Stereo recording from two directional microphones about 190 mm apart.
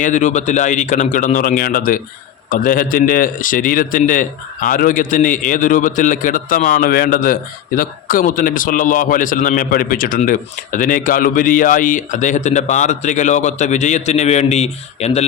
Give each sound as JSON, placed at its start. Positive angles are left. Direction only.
{"t": 0.0, "sound": "a man's voice", "side_deg": 40}